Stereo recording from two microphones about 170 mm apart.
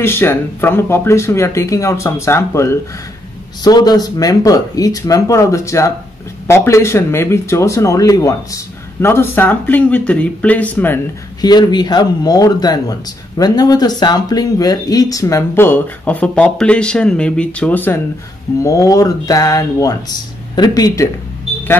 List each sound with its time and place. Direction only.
0.0 s speech: 15° left (ahead or behind)
11.4 s speech: 25° left (ahead or behind)